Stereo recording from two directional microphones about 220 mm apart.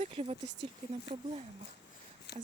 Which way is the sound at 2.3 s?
50° left (ahead or behind).